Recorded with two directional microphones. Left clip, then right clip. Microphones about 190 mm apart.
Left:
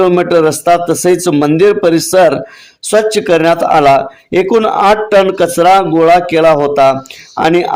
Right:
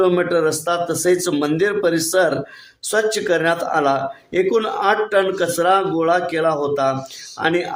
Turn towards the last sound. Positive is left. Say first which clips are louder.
# left 9 dB
turn(degrees=40)  # may be behind; listen again after turning